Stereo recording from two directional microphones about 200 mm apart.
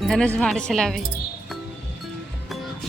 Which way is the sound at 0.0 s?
5° left (ahead or behind).